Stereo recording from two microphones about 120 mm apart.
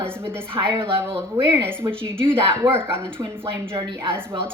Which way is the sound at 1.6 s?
20° right (ahead or behind).